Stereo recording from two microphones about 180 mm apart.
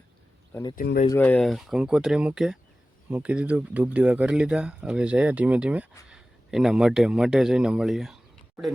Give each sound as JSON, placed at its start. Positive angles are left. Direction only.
{"t": 0.5, "sound": "speech", "side_deg": 20}
{"t": 0.8, "sound": "speech", "side_deg": 50}
{"t": 1.2, "sound": "a man's voice", "side_deg": 5}